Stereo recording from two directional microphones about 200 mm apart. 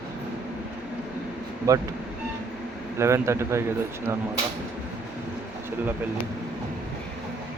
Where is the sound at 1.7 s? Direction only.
15° right (ahead or behind).